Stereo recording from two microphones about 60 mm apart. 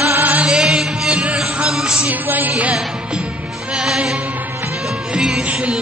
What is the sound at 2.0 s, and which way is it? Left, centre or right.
Music, right.